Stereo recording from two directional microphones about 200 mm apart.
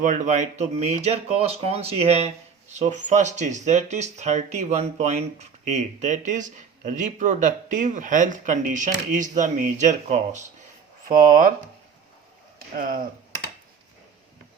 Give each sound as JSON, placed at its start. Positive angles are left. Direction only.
{"t": 0.0, "sound": "speech", "side_deg": -40}
{"t": 12.5, "sound": "speech", "side_deg": -45}